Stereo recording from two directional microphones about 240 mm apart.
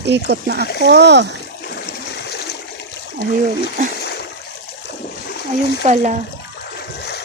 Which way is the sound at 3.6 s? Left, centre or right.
Left.